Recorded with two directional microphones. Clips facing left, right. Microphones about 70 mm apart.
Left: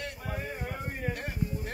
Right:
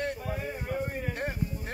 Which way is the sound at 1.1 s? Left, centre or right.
Right.